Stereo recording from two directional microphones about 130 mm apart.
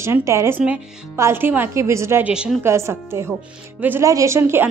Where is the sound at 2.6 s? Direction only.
20° right (ahead or behind).